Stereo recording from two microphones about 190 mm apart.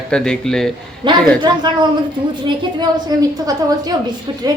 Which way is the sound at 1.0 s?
25° right (ahead or behind).